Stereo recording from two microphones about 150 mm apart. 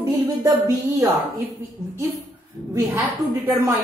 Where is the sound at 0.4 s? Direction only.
20° right (ahead or behind).